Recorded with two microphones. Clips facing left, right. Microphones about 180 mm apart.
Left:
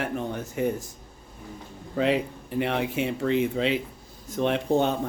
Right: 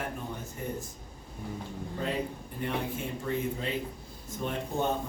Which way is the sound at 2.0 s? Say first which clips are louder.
Left 9 dB; 90° left.